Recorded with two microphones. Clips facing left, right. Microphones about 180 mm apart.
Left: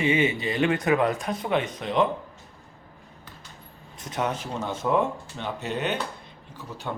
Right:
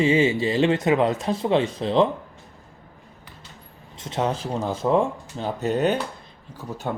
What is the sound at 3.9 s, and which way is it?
Speech, 25° right (ahead or behind).